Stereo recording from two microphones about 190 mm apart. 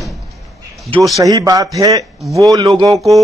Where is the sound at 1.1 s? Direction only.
15° right (ahead or behind).